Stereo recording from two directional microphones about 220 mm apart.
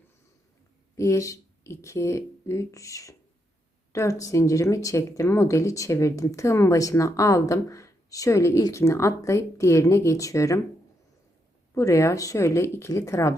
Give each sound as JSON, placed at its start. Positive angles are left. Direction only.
{"t": 0.9, "sound": "speech", "side_deg": 15}
{"t": 11.7, "sound": "speech", "side_deg": 15}